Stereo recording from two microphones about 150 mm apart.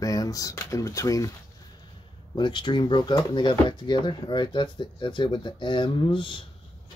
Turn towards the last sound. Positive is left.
turn(degrees=35)  # may be behind; listen again after turning